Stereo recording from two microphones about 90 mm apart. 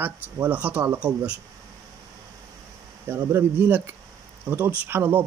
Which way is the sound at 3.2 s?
35° right (ahead or behind).